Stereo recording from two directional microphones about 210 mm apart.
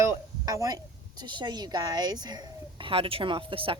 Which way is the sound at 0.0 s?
15° right (ahead or behind).